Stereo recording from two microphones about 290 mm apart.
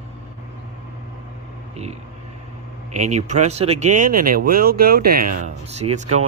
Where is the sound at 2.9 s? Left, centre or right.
Right.